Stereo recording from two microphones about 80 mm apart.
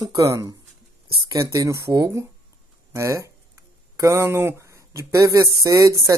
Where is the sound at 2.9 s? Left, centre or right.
Right.